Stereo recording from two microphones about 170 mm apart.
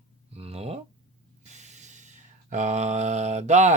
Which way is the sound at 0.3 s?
35° right (ahead or behind).